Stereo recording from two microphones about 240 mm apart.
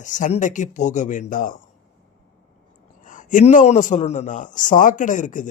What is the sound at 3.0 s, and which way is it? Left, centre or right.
A man's voice, left.